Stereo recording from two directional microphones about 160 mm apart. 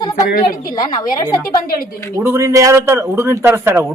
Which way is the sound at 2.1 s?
15° right (ahead or behind).